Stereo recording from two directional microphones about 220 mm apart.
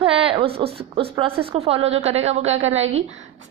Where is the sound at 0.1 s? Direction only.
25° right (ahead or behind).